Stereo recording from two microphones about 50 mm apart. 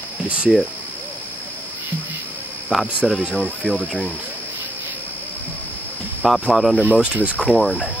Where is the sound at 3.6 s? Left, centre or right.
Left.